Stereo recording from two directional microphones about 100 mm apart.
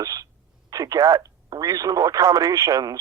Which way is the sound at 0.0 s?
35° right (ahead or behind).